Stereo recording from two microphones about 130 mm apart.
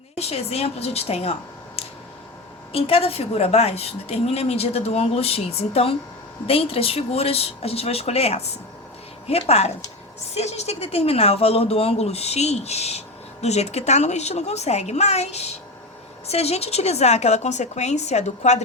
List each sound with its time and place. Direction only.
0.2 s a woman's voice: 50° left (ahead or behind)